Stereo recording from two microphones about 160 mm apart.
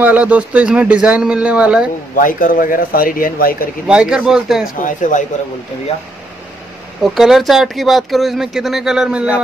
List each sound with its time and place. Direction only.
0.0 s a man's voice: 10° right (ahead or behind)
2.1 s speech: 60° left (ahead or behind)
3.8 s speech: 5° right (ahead or behind)
4.8 s speech: 55° left (ahead or behind)
7.2 s speech: centre (ahead or behind)